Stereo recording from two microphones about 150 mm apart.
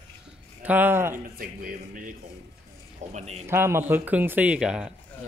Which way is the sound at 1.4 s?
65° right (ahead or behind).